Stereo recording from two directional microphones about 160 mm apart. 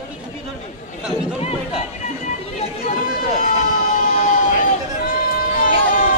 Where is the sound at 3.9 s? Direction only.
50° left (ahead or behind).